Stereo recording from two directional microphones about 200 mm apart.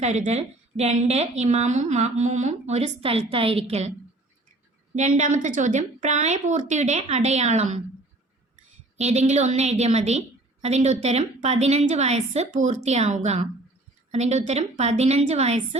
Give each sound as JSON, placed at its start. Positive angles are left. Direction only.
{"t": 0.0, "sound": "speech", "side_deg": -35}
{"t": 4.9, "sound": "speech", "side_deg": -35}
{"t": 9.0, "sound": "speech", "side_deg": -35}